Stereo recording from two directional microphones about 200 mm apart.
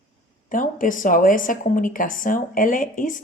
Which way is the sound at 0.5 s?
40° left (ahead or behind).